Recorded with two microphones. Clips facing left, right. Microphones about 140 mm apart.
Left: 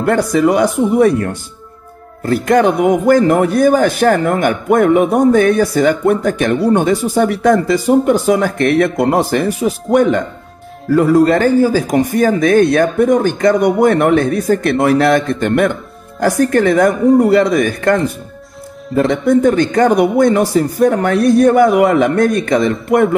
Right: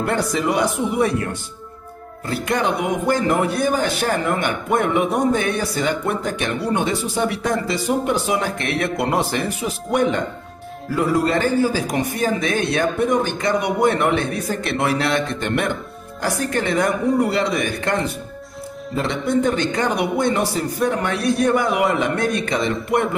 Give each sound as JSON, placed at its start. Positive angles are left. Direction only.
{"t": 0.0, "sound": "a man's voice", "side_deg": 45}
{"t": 10.9, "sound": "a man's voice", "side_deg": 45}